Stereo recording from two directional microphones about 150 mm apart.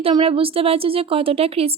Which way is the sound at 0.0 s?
35° right (ahead or behind).